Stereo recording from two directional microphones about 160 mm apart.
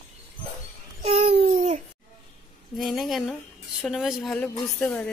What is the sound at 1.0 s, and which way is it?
Babbling, 40° right (ahead or behind).